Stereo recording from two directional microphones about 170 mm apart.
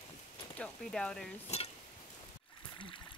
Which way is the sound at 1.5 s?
40° left (ahead or behind).